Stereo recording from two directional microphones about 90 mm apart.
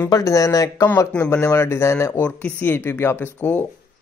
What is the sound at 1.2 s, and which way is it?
Speech, 25° left (ahead or behind).